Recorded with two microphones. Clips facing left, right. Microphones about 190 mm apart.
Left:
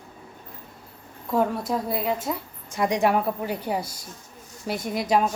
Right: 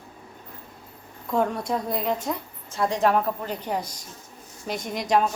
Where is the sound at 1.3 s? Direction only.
5° left (ahead or behind).